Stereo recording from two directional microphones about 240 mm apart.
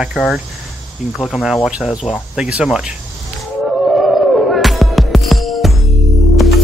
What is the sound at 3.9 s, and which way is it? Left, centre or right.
Music, centre.